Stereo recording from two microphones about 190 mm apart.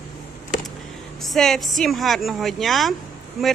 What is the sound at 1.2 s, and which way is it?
Speech, centre (ahead or behind).